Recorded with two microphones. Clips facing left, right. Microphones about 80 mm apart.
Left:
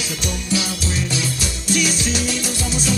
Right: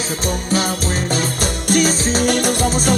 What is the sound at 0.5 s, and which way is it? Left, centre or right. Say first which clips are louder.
Music: right 3 dB; right.